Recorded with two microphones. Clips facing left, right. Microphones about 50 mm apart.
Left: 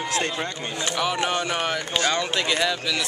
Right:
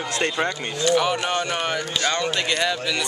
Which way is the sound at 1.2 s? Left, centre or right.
Centre.